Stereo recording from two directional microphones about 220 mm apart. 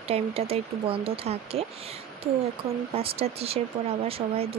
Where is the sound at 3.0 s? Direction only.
25° right (ahead or behind).